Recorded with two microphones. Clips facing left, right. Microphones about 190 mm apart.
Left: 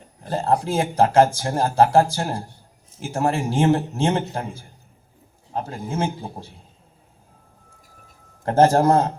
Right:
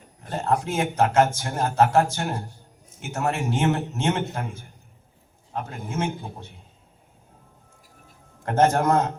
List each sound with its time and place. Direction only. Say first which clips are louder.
0.2 s speech: left 3 dB; 35° left (ahead or behind)
8.4 s speech: left 4 dB; 30° left (ahead or behind)